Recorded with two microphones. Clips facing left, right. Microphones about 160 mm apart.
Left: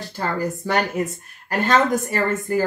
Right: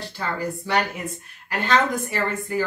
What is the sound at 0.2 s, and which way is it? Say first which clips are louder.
A woman's voice: left 4 dB; 45° left (ahead or behind).